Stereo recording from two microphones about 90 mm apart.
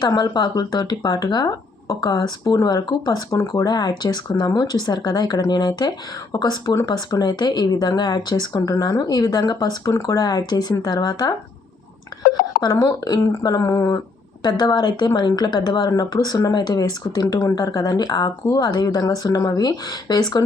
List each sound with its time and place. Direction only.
0.2 s speech: 50° left (ahead or behind)
12.5 s speech: 45° left (ahead or behind)
13.6 s speech: 35° left (ahead or behind)
14.4 s speech: 55° left (ahead or behind)